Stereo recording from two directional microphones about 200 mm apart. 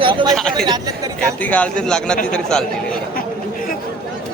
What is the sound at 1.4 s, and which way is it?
A man's voice, 5° left (ahead or behind).